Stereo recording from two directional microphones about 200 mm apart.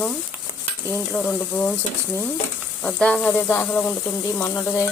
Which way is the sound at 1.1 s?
5° left (ahead or behind).